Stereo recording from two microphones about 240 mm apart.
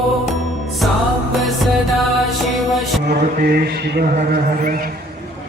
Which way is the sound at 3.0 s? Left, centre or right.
Right.